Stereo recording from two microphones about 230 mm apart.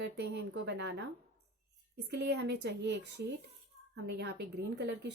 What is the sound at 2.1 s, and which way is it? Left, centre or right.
A woman's voice, right.